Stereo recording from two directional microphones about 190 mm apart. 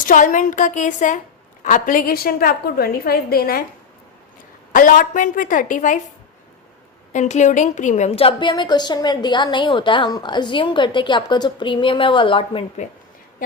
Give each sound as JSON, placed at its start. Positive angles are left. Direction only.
{"t": 0.0, "sound": "a woman's voice", "side_deg": 45}
{"t": 4.7, "sound": "a woman's voice", "side_deg": 45}
{"t": 7.1, "sound": "a woman's voice", "side_deg": 40}